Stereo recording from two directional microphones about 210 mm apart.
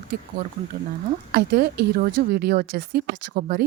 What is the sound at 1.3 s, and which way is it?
Speech, 50° right (ahead or behind).